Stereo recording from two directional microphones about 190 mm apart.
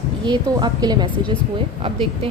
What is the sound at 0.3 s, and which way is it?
A woman's voice, 20° right (ahead or behind).